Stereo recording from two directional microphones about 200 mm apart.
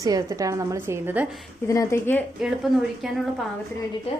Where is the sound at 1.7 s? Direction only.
15° left (ahead or behind).